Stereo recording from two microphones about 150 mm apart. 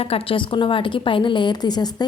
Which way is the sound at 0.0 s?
40° left (ahead or behind).